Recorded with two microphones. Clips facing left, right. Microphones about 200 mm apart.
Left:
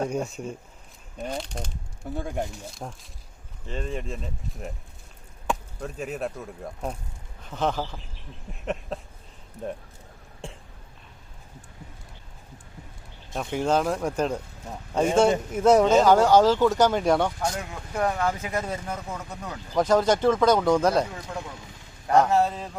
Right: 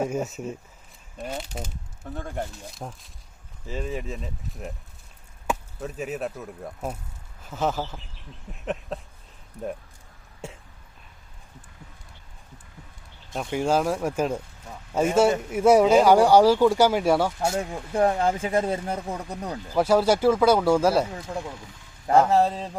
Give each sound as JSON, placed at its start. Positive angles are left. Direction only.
{"t": 0.0, "sound": "speech", "side_deg": -5}
{"t": 2.0, "sound": "speech", "side_deg": 10}
{"t": 2.7, "sound": "speech", "side_deg": 0}
{"t": 10.4, "sound": "throat clearing", "side_deg": -5}
{"t": 13.3, "sound": "speech", "side_deg": 0}
{"t": 17.4, "sound": "speech", "side_deg": -30}
{"t": 19.7, "sound": "speech", "side_deg": -10}
{"t": 22.3, "sound": "speech", "side_deg": -30}